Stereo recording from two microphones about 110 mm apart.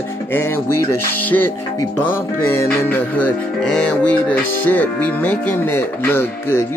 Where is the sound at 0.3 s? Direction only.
20° left (ahead or behind).